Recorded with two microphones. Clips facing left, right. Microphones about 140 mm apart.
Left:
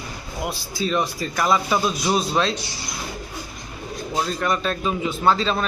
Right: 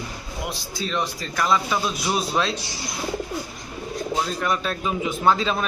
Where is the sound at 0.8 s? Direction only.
5° left (ahead or behind).